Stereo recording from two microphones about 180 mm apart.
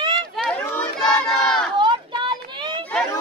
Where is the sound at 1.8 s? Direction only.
25° right (ahead or behind).